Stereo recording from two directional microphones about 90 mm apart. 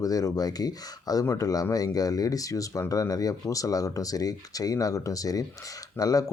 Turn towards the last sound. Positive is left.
turn(degrees=40)  # may be behind; listen again after turning